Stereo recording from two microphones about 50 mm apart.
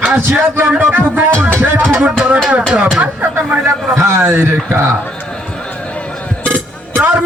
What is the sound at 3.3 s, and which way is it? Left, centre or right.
Music, right.